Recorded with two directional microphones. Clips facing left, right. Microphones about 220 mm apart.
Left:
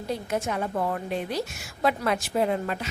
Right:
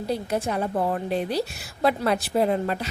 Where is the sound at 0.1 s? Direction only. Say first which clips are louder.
Right 2 dB; 35° right (ahead or behind).